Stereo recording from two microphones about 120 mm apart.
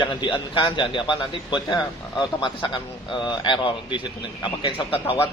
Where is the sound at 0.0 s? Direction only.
40° left (ahead or behind).